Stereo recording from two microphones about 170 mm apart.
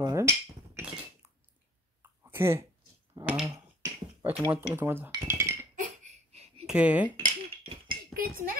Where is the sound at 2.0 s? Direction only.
15° right (ahead or behind).